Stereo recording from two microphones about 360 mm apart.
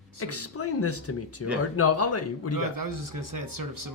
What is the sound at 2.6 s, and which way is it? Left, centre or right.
Speech, right.